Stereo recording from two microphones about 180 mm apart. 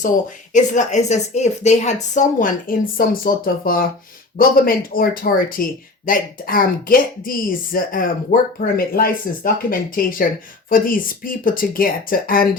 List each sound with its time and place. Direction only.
0.5 s speech: 40° left (ahead or behind)